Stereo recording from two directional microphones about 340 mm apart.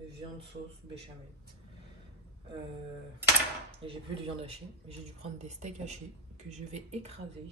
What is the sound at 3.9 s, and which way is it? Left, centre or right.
A woman's voice, centre.